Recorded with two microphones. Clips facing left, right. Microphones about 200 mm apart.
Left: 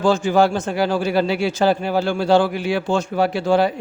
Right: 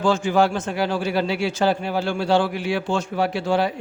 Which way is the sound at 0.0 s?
35° left (ahead or behind).